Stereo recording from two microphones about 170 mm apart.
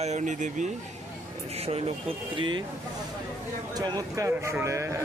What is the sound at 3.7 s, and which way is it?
Speech, 25° right (ahead or behind).